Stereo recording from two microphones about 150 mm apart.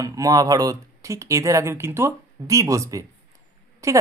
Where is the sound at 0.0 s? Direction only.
25° right (ahead or behind).